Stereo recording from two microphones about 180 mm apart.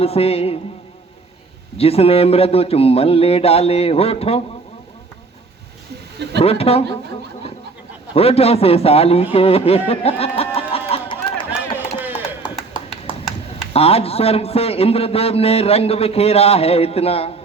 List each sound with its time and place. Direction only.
0.0 s a man's voice: 35° left (ahead or behind)
1.8 s a man's voice: 35° left (ahead or behind)
6.4 s a man's voice: 35° left (ahead or behind)
8.1 s a man's voice: 35° left (ahead or behind)
9.3 s a sound: 35° left (ahead or behind)
11.9 s a sound: 10° right (ahead or behind)
13.7 s a man's voice: 35° left (ahead or behind)